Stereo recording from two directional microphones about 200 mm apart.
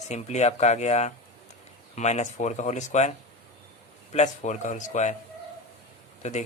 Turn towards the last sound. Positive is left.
turn(degrees=35)  # may be behind; listen again after turning